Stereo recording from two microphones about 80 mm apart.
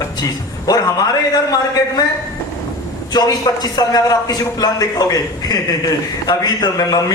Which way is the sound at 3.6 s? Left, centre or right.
Left.